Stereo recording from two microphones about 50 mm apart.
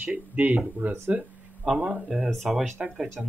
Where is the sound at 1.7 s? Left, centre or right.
Centre.